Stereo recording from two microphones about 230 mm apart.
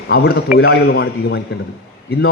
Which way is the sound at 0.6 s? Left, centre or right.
Left.